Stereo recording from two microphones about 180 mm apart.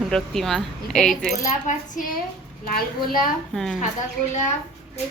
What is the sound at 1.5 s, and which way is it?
Coin, 45° left (ahead or behind).